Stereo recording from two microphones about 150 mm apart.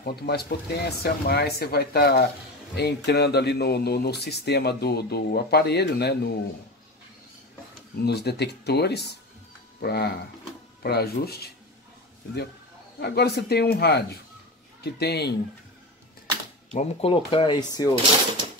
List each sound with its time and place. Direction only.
0.0 s speech: 90° left
8.0 s speech: 90° left
13.0 s speech: 90° left
16.7 s speech: 40° left (ahead or behind)